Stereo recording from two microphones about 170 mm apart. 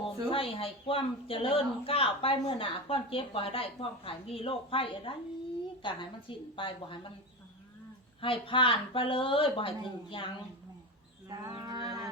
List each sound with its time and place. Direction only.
0.3 s a woman's voice: 30° left (ahead or behind)
8.2 s a woman's voice: 30° left (ahead or behind)
11.3 s livestock: 20° right (ahead or behind)